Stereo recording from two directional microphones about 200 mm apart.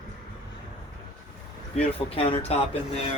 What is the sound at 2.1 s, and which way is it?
Speech, 30° left (ahead or behind).